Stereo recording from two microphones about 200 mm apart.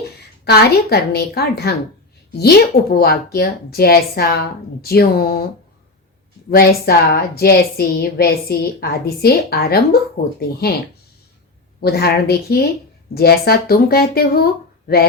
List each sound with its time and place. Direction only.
0.4 s a woman's voice: 55° left (ahead or behind)
6.5 s a woman's voice: 50° left (ahead or behind)
11.8 s a woman's voice: 50° left (ahead or behind)